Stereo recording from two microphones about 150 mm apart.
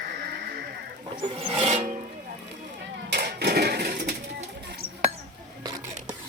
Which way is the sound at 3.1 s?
90° right.